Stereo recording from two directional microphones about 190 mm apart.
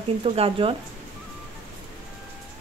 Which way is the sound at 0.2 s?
30° right (ahead or behind).